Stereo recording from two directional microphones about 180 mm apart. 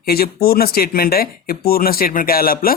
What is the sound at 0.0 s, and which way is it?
Speech, 55° left (ahead or behind).